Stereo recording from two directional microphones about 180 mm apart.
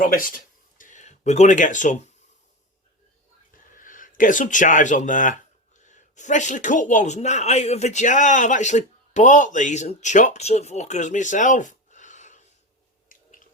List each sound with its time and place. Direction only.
0.0 s speech: 50° left (ahead or behind)
3.5 s speech: 50° left (ahead or behind)
13.1 s squish: 45° left (ahead or behind)